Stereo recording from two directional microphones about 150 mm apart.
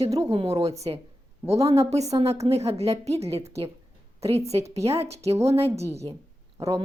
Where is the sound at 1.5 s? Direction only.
20° right (ahead or behind).